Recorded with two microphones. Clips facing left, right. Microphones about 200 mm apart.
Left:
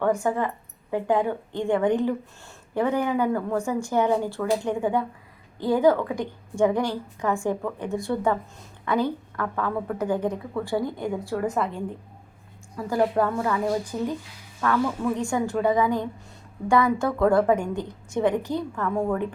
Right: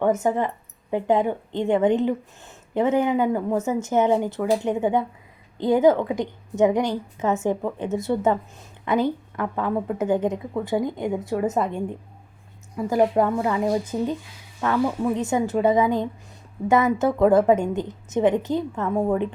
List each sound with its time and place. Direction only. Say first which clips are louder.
0.0 s a woman's voice: right 2 dB; 20° right (ahead or behind)